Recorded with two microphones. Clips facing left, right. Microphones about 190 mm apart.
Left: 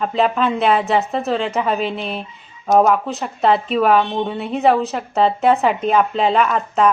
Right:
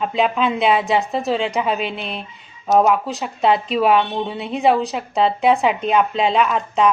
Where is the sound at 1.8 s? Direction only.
35° left (ahead or behind).